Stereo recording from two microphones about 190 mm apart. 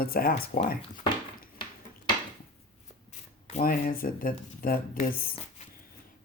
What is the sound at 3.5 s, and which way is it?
Speech, 45° left (ahead or behind).